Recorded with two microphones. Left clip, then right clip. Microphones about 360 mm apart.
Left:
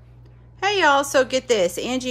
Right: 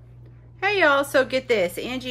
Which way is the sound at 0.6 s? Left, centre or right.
Centre.